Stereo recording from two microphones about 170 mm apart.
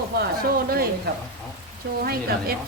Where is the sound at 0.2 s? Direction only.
60° right (ahead or behind).